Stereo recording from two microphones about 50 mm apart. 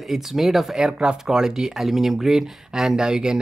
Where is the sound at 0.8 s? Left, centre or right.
Centre.